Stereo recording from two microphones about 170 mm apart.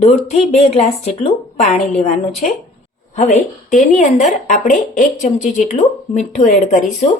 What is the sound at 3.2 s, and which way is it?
Speech, 45° left (ahead or behind).